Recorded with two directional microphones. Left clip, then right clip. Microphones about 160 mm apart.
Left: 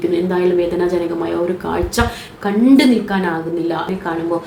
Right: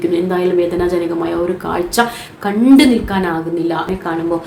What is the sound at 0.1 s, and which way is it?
A woman's voice, 15° right (ahead or behind).